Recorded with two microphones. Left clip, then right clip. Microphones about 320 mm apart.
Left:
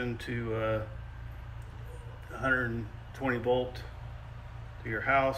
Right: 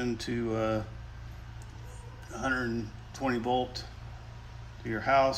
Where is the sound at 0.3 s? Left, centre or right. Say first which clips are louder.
Right 1 dB; centre.